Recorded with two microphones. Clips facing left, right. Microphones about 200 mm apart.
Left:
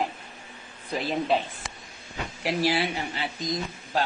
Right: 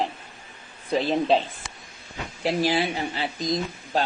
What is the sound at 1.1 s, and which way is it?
Speech, 25° right (ahead or behind).